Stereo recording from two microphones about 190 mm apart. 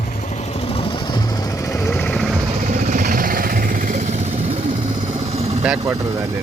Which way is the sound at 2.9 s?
45° right (ahead or behind).